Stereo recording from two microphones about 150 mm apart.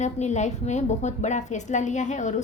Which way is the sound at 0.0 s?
50° left (ahead or behind).